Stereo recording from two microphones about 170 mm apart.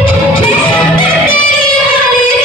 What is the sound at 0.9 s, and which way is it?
Music, 30° left (ahead or behind).